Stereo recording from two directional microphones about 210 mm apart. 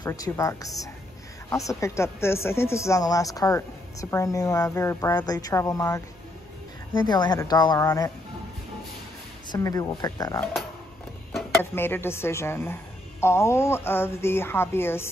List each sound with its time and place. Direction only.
0.0 s speech: 15° left (ahead or behind)
9.5 s speech: 15° left (ahead or behind)
11.7 s speech: 10° left (ahead or behind)